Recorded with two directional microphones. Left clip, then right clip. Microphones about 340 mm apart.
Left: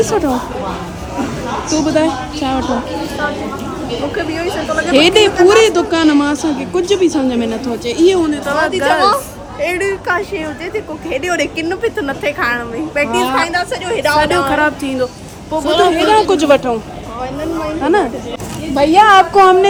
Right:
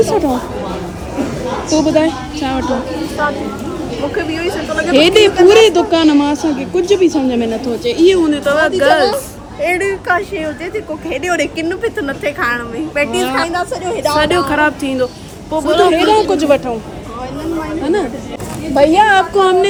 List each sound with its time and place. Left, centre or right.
0.0 s a woman's voice: centre
1.7 s a woman's voice: centre
4.1 s a woman's voice: centre
13.5 s a woman's voice: left
14.2 s a woman's voice: centre
16.3 s speech: centre
17.8 s a woman's voice: centre